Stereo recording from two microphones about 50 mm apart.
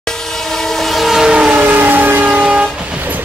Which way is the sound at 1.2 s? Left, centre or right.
Centre.